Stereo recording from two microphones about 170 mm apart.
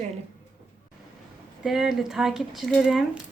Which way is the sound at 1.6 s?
Centre (ahead or behind).